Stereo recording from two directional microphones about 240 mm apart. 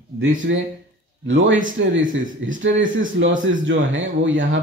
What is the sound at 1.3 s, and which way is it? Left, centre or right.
Speech, right.